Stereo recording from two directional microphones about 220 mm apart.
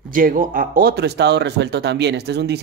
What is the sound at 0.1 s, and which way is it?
Speech, 40° right (ahead or behind).